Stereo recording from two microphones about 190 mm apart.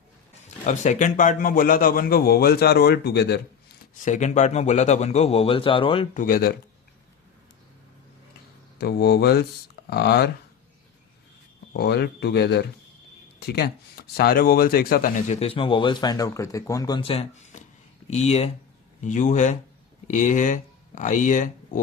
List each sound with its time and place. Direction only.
0.4 s a man's voice: 40° left (ahead or behind); by 3.4 s 60° left (ahead or behind)
4.0 s speech: 40° left (ahead or behind)
6.1 s a man's voice: 50° left (ahead or behind)
8.8 s speech: 55° left (ahead or behind)
11.7 s speech: 60° left (ahead or behind); by 21.8 s 40° left (ahead or behind)